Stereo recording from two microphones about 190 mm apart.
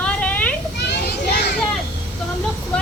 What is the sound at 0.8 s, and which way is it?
Children playing, 65° left (ahead or behind).